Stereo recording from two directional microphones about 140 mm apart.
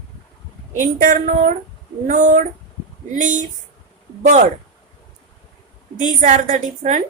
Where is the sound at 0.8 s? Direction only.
65° right (ahead or behind).